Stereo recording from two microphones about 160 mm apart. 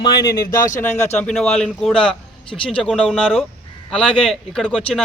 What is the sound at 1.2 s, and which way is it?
A man's voice, 5° left (ahead or behind).